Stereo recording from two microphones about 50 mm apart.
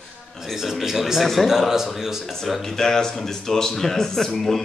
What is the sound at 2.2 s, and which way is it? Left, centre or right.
Speech, centre.